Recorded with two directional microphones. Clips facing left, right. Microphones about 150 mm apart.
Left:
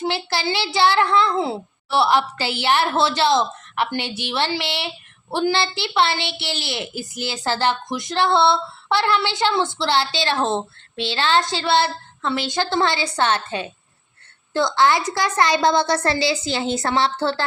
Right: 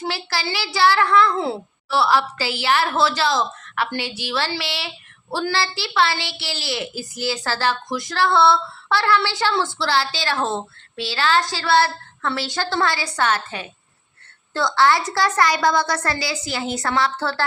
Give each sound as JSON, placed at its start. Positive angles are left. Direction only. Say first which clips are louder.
{"t": 0.0, "sound": "a woman's voice", "louder": "left 3 dB", "side_deg": 25}